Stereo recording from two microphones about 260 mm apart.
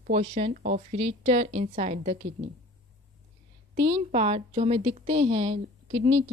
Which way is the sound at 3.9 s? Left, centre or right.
Right.